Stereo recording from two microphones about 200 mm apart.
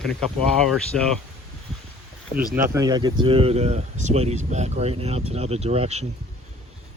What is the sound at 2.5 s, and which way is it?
Speech, 15° right (ahead or behind).